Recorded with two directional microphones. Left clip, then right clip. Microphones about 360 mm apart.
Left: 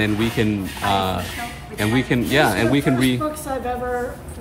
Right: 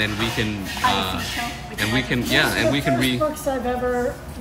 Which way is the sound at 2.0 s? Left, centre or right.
Centre.